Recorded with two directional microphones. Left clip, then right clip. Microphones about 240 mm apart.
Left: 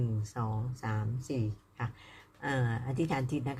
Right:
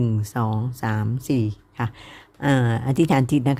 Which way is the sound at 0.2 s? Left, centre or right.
Right.